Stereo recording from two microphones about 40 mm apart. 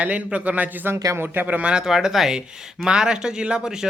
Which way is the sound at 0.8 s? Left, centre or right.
Right.